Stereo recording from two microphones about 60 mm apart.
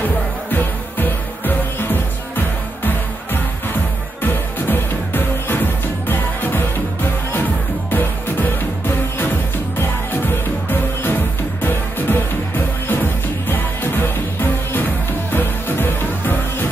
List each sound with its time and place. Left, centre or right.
0.0 s music: left
4.2 s music: left